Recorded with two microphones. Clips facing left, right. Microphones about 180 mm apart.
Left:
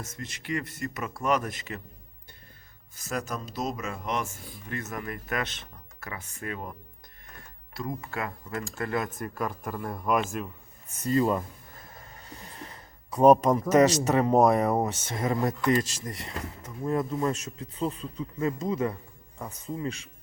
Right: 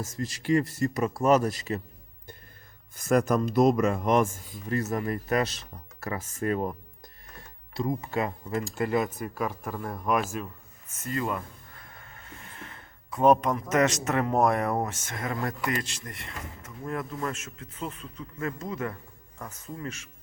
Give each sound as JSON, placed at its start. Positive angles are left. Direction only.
{"t": 0.2, "sound": "speech", "side_deg": -40}
{"t": 0.6, "sound": "speech", "side_deg": 0}
{"t": 0.9, "sound": "speech", "side_deg": -35}
{"t": 2.9, "sound": "speech", "side_deg": -55}
{"t": 4.6, "sound": "speech", "side_deg": -35}
{"t": 7.8, "sound": "speech", "side_deg": -20}
{"t": 9.0, "sound": "speech", "side_deg": 0}
{"t": 11.1, "sound": "a man's voice", "side_deg": 30}
{"t": 12.5, "sound": "a sound", "side_deg": 35}
{"t": 13.2, "sound": "speech", "side_deg": 0}
{"t": 15.2, "sound": "speech", "side_deg": 20}
{"t": 16.8, "sound": "speech", "side_deg": 20}
{"t": 17.3, "sound": "a man's voice", "side_deg": 35}
{"t": 18.3, "sound": "speech", "side_deg": 20}